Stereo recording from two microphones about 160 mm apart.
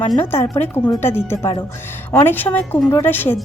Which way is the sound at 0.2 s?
15° left (ahead or behind).